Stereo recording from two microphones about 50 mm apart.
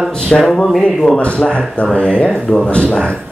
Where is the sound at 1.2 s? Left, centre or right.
Left.